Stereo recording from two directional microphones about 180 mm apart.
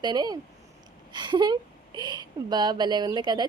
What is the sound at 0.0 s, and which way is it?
Speech, 20° right (ahead or behind).